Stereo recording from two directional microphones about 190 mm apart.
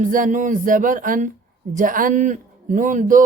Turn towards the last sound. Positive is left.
turn(degrees=-45)  # may be behind; listen again after turning